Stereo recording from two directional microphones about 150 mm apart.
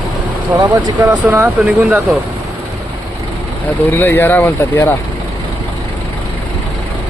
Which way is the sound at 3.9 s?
15° left (ahead or behind).